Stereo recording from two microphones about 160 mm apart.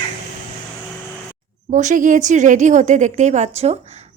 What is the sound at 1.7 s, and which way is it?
Speech, 50° right (ahead or behind).